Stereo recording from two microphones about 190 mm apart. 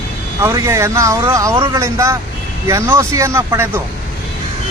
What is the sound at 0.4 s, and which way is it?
Speech, 15° right (ahead or behind).